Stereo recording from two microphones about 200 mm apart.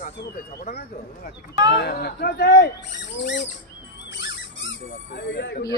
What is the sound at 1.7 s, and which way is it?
A man's voice, 55° left (ahead or behind).